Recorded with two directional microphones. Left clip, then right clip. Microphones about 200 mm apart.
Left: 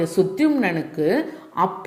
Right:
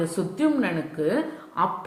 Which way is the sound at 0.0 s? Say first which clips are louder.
Left 6 dB; 25° left (ahead or behind).